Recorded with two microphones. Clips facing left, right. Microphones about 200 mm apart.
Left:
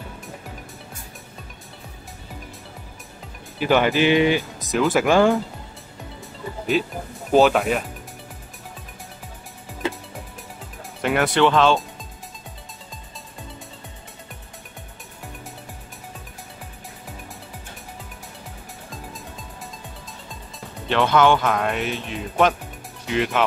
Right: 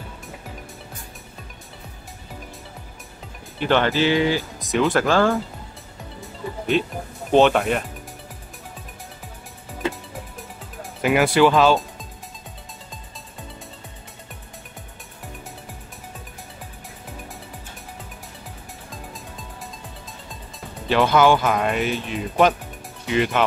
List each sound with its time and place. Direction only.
3.5 s speech: 10° left (ahead or behind)
4.6 s speech: centre (ahead or behind)
5.0 s speech: 15° left (ahead or behind)
6.7 s speech: 5° left (ahead or behind)
10.8 s speech: 5° right (ahead or behind)
20.8 s speech: 5° right (ahead or behind)